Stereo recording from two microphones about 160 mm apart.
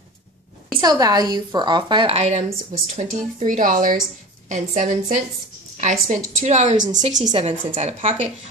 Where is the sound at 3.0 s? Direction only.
55° right (ahead or behind).